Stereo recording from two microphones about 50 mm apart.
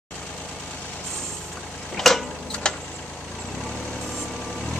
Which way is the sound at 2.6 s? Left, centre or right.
Centre.